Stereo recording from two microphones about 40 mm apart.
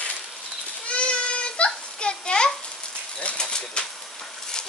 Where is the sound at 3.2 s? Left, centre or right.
Left.